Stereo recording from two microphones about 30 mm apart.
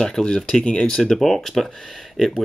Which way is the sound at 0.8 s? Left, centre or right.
Centre.